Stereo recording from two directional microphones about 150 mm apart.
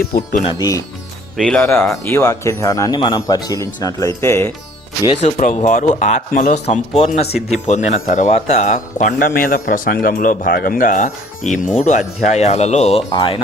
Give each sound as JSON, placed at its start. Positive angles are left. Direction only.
{"t": 0.0, "sound": "speech", "side_deg": 80}
{"t": 1.4, "sound": "speech", "side_deg": 5}
{"t": 5.0, "sound": "a man's voice", "side_deg": 50}
{"t": 13.1, "sound": "speech", "side_deg": 35}